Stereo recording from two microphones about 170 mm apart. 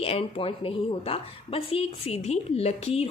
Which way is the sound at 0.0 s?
35° left (ahead or behind).